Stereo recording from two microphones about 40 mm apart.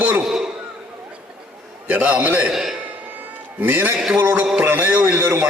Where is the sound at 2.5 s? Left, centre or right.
Centre.